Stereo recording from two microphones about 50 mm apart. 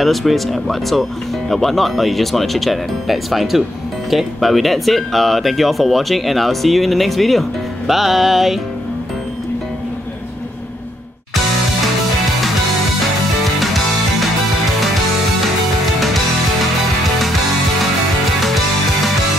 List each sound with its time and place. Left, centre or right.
0.0 s speech: centre